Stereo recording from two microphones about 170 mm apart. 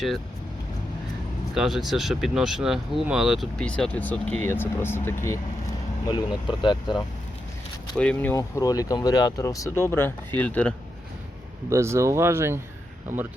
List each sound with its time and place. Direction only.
1.5 s speech: centre (ahead or behind); by 5.4 s 15° left (ahead or behind)
6.1 s speech: 25° left (ahead or behind)
7.9 s speech: 10° left (ahead or behind)
11.7 s speech: 15° right (ahead or behind)